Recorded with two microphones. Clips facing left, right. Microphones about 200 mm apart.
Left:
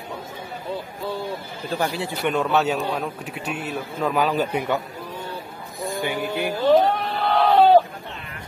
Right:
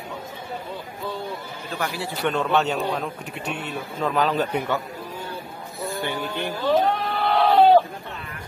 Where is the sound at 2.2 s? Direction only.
5° left (ahead or behind).